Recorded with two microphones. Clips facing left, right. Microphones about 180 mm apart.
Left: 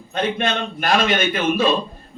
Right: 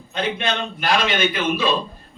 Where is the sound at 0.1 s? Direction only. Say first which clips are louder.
Left 2 dB; 50° left (ahead or behind).